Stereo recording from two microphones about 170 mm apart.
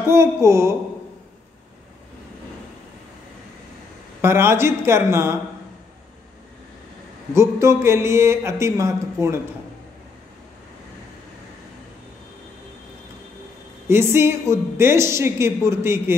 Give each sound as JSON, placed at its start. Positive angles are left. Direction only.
{"t": 0.1, "sound": "a woman's voice", "side_deg": -15}
{"t": 4.2, "sound": "a woman's voice", "side_deg": -15}
{"t": 7.3, "sound": "a woman's voice", "side_deg": -15}
{"t": 13.8, "sound": "a woman's voice", "side_deg": -15}